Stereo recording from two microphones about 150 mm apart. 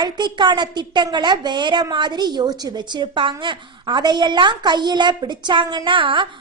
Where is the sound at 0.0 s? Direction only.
30° right (ahead or behind).